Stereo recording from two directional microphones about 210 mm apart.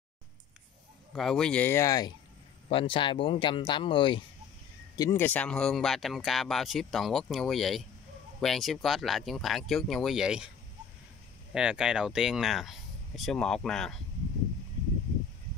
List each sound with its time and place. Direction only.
1.1 s speech: centre (ahead or behind)
11.5 s speech: 5° right (ahead or behind)